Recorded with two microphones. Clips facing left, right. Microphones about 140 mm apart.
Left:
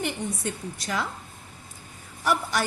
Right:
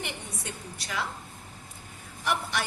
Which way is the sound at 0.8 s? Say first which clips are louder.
Left 3 dB; 50° left (ahead or behind).